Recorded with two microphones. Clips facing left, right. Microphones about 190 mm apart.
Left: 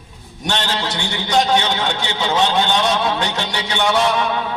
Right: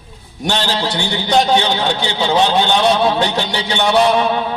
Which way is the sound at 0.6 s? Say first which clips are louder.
Right 4 dB; 35° right (ahead or behind).